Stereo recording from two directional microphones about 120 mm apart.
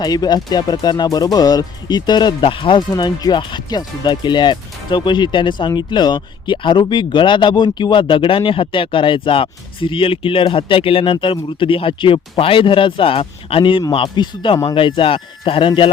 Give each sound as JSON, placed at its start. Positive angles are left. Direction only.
{"t": 0.0, "sound": "speech", "side_deg": 35}
{"t": 2.9, "sound": "speech", "side_deg": 35}